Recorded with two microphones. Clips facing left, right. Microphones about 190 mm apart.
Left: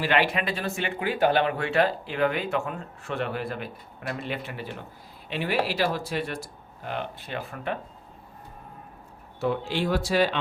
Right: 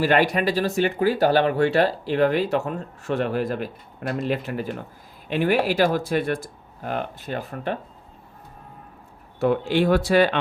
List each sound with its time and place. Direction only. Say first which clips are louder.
0.0 s speech: right 5 dB; 45° right (ahead or behind)
9.4 s speech: right 6 dB; 55° right (ahead or behind)